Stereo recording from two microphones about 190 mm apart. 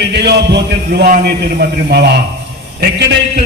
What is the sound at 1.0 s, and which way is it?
A man's voice, 50° right (ahead or behind).